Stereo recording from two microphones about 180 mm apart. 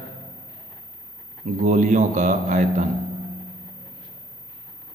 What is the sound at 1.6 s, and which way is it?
A man's voice, 40° right (ahead or behind).